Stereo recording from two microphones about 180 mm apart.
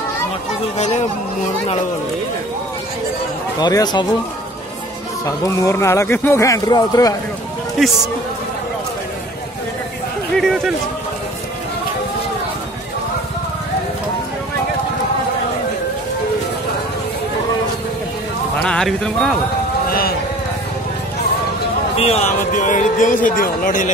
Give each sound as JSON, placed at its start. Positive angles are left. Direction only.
{"t": 0.7, "sound": "speech", "side_deg": 40}
{"t": 3.5, "sound": "speech", "side_deg": 20}
{"t": 5.2, "sound": "speech", "side_deg": 15}
{"t": 7.8, "sound": "speech", "side_deg": 0}
{"t": 10.3, "sound": "a sound", "side_deg": 0}
{"t": 18.6, "sound": "speech", "side_deg": 5}
{"t": 19.9, "sound": "a sound", "side_deg": 55}
{"t": 21.9, "sound": "speech", "side_deg": 35}